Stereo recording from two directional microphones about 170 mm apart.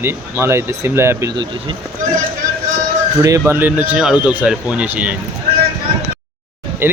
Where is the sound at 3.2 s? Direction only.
15° right (ahead or behind).